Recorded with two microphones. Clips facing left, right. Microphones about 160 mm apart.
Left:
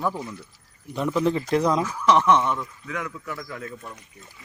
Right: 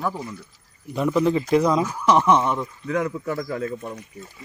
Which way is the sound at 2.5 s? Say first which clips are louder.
Right 7 dB; 25° right (ahead or behind).